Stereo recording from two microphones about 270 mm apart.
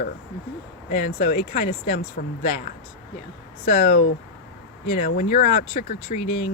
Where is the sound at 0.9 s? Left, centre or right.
Left.